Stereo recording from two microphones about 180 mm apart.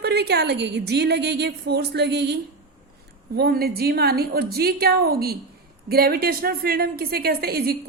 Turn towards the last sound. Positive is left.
turn(degrees=-60)  # may be behind; listen again after turning